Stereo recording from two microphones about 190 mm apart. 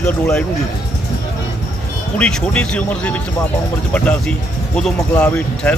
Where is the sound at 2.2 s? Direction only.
5° left (ahead or behind).